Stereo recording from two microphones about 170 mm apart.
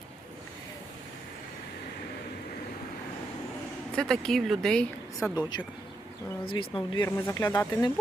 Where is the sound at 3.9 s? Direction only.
5° left (ahead or behind).